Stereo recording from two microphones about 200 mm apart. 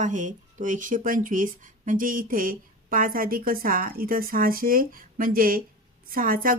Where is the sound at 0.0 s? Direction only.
40° right (ahead or behind).